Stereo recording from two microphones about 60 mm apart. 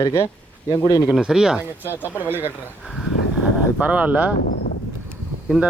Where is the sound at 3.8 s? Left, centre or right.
Right.